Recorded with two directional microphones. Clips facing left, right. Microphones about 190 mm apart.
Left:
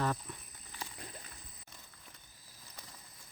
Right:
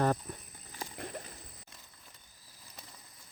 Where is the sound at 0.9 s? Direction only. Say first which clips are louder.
Right 8 dB; 65° right (ahead or behind).